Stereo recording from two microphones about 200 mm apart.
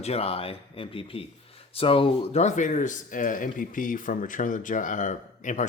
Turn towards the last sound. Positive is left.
turn(degrees=40)  # may be behind; listen again after turning